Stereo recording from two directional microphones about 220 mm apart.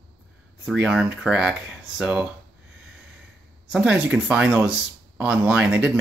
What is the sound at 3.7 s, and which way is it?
Speech, 5° right (ahead or behind).